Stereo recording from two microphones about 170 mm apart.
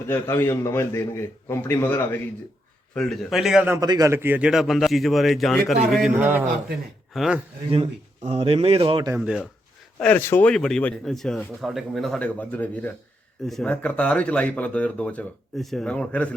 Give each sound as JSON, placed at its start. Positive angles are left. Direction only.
{"t": 0.1, "sound": "speech", "side_deg": 15}
{"t": 3.8, "sound": "speech", "side_deg": -20}
{"t": 7.7, "sound": "speech", "side_deg": -35}
{"t": 9.1, "sound": "speech", "side_deg": -5}
{"t": 10.0, "sound": "speech", "side_deg": 10}